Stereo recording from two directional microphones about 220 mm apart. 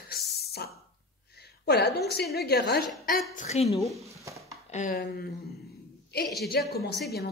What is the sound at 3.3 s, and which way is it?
Speech, 30° left (ahead or behind).